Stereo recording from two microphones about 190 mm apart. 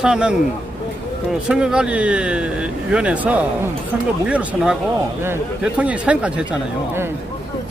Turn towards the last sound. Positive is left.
turn(degrees=-5)  # may be behind; listen again after turning